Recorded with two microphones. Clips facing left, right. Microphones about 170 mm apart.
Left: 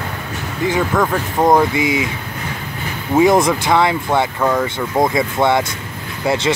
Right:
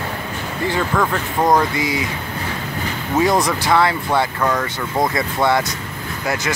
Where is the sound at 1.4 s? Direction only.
20° left (ahead or behind).